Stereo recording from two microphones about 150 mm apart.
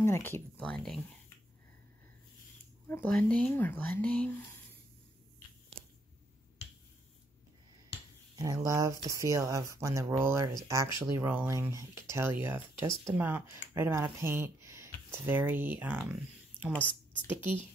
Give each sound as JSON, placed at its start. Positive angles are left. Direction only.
{"t": 0.0, "sound": "speech", "side_deg": 15}
{"t": 2.9, "sound": "speech", "side_deg": 10}
{"t": 8.4, "sound": "speech", "side_deg": -20}
{"t": 16.7, "sound": "a woman's voice", "side_deg": 10}